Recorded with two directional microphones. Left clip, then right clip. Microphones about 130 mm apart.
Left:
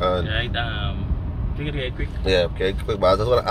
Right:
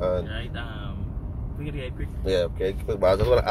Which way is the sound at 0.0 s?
15° left (ahead or behind).